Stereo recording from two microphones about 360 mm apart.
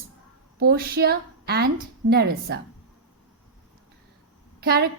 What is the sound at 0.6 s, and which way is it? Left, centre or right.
A woman's voice, right.